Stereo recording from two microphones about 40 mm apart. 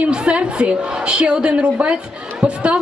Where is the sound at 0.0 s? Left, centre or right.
Right.